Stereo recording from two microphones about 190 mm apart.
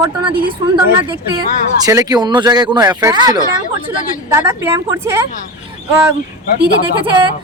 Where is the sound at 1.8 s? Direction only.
20° right (ahead or behind).